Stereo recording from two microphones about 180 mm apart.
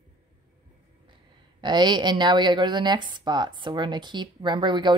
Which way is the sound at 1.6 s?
25° right (ahead or behind).